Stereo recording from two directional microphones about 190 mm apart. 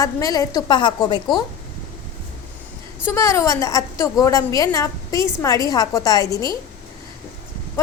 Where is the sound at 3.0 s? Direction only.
15° left (ahead or behind).